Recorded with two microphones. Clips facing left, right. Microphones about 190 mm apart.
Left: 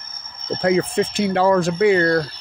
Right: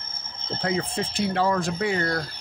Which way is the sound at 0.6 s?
75° left (ahead or behind).